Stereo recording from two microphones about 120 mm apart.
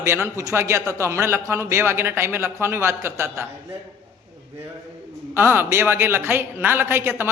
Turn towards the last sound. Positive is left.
turn(degrees=-20)  # may be behind; listen again after turning